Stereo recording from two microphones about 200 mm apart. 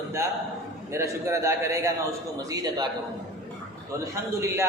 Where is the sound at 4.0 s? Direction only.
15° right (ahead or behind).